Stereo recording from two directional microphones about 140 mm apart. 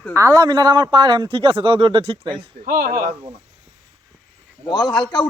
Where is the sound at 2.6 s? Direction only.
90° right.